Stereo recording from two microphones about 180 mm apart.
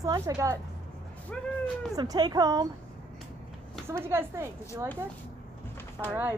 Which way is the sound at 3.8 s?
15° right (ahead or behind).